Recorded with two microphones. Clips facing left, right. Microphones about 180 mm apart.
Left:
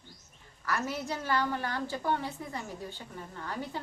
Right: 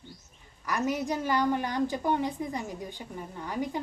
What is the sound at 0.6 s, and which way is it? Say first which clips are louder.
A woman's voice: right 4 dB; 15° right (ahead or behind).